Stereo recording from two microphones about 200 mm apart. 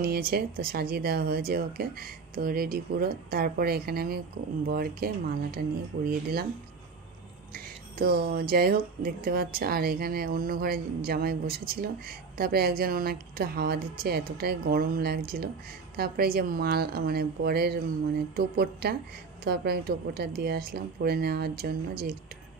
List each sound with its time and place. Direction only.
0.0 s speech: 50° right (ahead or behind)
7.5 s speech: 45° right (ahead or behind)